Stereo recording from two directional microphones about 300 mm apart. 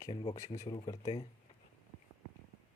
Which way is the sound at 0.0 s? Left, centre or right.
Centre.